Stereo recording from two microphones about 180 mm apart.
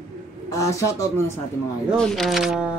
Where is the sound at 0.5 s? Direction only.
15° left (ahead or behind).